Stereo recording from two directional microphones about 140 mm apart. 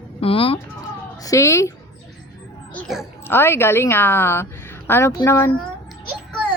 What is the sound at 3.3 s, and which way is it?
A woman's voice, 15° left (ahead or behind).